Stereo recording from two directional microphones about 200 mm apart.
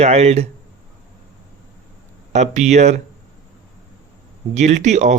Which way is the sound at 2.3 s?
35° right (ahead or behind).